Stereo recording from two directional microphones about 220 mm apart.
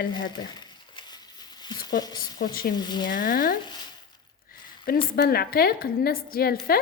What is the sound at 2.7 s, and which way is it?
Speech, 20° left (ahead or behind).